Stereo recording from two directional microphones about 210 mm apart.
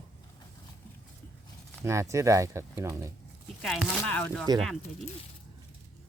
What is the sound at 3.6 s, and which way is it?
Speech, centre (ahead or behind).